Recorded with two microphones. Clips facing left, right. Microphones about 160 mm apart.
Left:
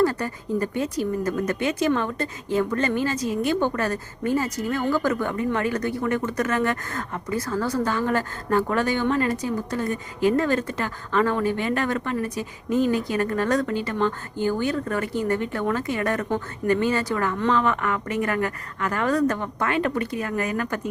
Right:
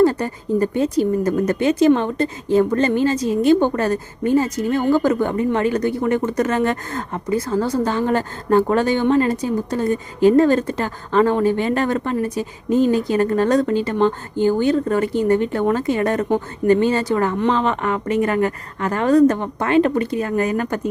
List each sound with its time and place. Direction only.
0.0 s speech: 25° right (ahead or behind)